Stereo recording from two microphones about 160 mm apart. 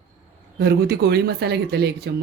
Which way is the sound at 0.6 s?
90° right.